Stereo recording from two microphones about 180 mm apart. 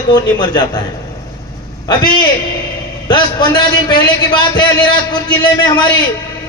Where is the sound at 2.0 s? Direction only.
25° left (ahead or behind).